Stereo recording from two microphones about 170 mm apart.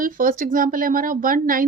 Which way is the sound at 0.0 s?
55° right (ahead or behind).